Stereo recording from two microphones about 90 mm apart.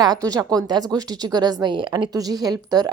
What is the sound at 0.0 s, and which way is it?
Speech, 45° right (ahead or behind).